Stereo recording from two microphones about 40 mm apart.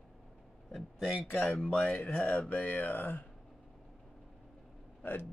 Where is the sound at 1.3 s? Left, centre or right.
Left.